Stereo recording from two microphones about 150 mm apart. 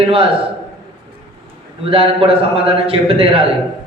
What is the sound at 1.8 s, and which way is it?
A man's voice, 35° right (ahead or behind).